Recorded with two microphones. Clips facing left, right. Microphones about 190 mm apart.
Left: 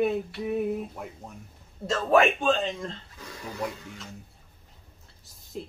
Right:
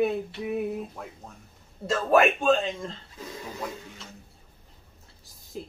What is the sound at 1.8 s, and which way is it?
A man's voice, centre (ahead or behind).